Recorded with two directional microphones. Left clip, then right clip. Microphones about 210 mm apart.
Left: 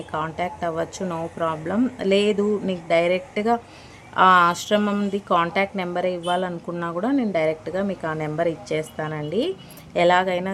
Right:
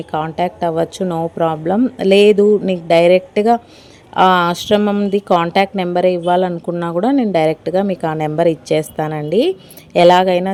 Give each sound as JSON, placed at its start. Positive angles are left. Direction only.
{"t": 0.1, "sound": "speech", "side_deg": -30}